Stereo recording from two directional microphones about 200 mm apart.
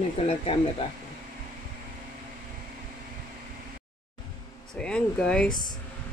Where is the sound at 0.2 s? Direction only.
30° left (ahead or behind).